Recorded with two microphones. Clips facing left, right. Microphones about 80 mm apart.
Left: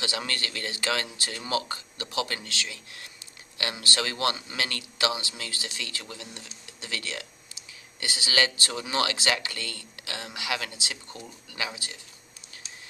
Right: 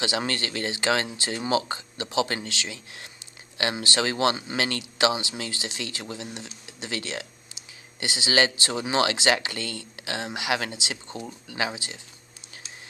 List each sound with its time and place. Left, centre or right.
0.0 s speech: right